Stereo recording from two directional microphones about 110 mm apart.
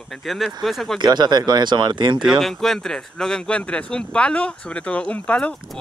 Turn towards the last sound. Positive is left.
turn(degrees=10)  # may be behind; listen again after turning